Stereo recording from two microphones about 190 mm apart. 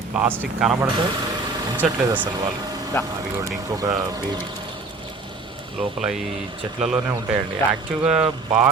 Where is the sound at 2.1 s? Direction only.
20° right (ahead or behind).